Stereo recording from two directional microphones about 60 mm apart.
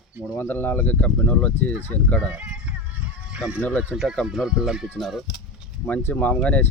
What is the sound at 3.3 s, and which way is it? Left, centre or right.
Speech, centre.